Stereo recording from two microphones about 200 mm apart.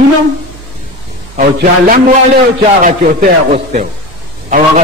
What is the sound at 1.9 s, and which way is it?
A man's voice, 40° right (ahead or behind).